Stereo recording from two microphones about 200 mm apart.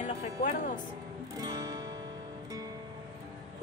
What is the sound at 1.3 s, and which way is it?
Music, 20° right (ahead or behind).